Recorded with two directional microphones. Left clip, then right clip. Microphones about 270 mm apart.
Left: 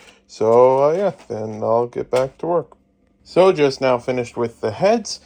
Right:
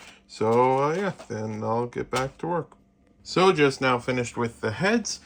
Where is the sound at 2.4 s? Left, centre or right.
Left.